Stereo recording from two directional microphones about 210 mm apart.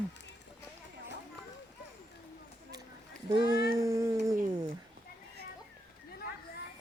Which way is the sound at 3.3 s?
20° right (ahead or behind).